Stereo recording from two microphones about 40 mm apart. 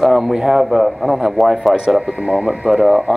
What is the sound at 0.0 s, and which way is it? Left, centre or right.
A man's voice, centre.